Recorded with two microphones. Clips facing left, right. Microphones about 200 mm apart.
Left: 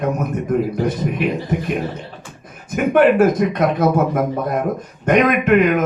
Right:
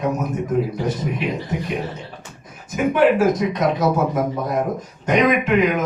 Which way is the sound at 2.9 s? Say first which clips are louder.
Left 4 dB; 55° left (ahead or behind).